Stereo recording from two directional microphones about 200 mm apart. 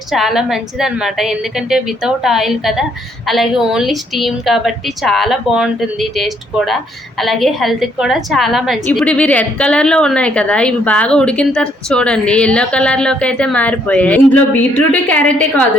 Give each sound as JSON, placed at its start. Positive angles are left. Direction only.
{"t": 0.1, "sound": "a woman's voice", "side_deg": 0}